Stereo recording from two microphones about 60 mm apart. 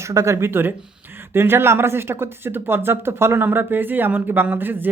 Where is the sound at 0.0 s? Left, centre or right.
Right.